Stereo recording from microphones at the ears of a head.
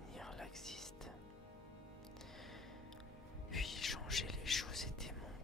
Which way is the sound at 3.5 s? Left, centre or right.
Left.